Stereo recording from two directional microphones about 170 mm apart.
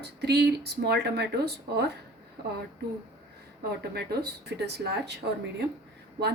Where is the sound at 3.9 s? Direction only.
75° right (ahead or behind).